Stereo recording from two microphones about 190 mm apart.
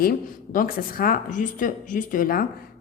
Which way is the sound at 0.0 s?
50° left (ahead or behind).